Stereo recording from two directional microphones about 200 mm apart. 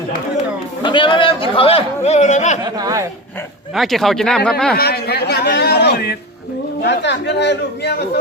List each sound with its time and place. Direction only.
0.8 s a sound: 25° left (ahead or behind)
2.7 s speech: 15° right (ahead or behind)
3.8 s speech: centre (ahead or behind)
4.8 s speech: 50° left (ahead or behind)